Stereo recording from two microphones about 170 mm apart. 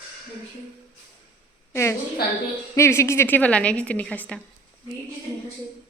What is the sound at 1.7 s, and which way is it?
A woman's voice, 15° left (ahead or behind).